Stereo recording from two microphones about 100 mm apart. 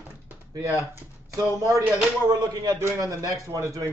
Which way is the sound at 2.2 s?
40° right (ahead or behind).